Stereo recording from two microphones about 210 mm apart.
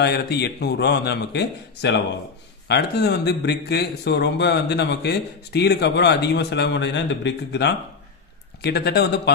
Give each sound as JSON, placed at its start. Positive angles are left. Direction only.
{"t": 0.0, "sound": "speech", "side_deg": 50}